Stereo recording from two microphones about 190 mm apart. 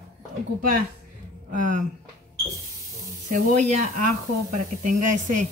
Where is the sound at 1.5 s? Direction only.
45° right (ahead or behind).